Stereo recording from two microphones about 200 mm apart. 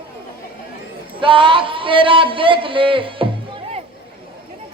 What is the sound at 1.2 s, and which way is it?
A man's voice, 25° right (ahead or behind).